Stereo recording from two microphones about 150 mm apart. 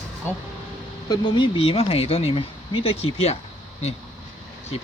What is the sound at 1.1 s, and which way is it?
Speech, 30° left (ahead or behind).